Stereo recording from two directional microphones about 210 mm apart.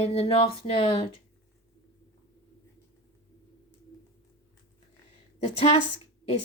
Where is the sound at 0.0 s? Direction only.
30° left (ahead or behind).